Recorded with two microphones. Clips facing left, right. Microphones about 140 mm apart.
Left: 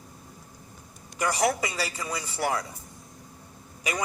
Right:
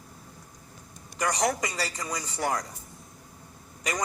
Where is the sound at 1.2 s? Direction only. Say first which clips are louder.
Left 1 dB; 10° left (ahead or behind).